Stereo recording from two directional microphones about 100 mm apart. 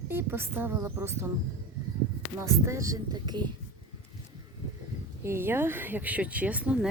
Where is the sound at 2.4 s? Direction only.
30° right (ahead or behind).